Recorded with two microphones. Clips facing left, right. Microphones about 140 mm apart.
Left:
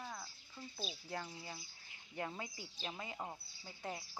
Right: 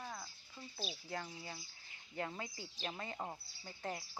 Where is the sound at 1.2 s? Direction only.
10° left (ahead or behind).